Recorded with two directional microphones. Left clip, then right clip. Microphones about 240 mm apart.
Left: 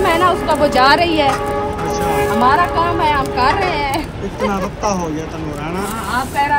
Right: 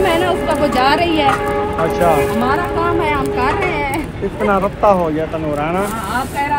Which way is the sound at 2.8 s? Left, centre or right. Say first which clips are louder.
Left 1 dB; left.